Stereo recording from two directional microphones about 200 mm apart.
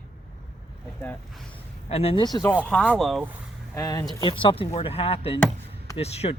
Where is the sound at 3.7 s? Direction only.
15° left (ahead or behind).